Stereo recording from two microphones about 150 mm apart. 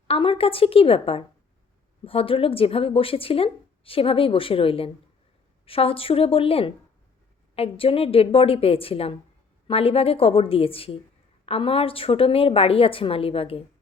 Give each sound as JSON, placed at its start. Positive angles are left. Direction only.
{"t": 0.1, "sound": "a woman's voice", "side_deg": 40}